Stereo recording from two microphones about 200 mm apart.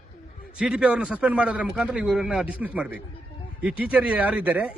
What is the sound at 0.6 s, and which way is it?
Speech, 5° right (ahead or behind).